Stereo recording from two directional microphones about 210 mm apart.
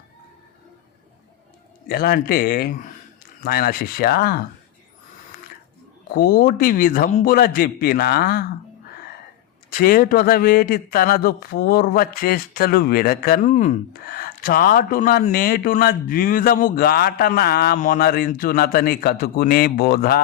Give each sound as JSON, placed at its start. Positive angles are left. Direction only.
{"t": 1.9, "sound": "speech", "side_deg": 45}
{"t": 6.1, "sound": "speech", "side_deg": 45}
{"t": 9.6, "sound": "speech", "side_deg": 40}